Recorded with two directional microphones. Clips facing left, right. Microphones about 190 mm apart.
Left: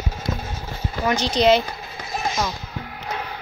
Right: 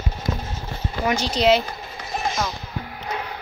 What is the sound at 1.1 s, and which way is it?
Speech, 5° right (ahead or behind).